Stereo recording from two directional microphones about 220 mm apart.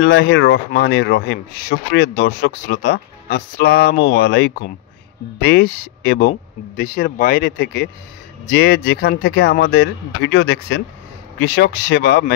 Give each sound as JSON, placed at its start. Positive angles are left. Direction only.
{"t": 0.0, "sound": "speech", "side_deg": 50}